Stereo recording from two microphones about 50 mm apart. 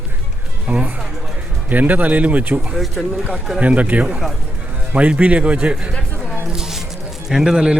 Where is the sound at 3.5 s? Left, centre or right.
Right.